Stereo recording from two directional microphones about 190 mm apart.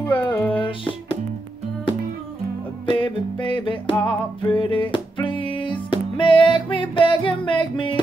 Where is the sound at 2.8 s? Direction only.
25° left (ahead or behind).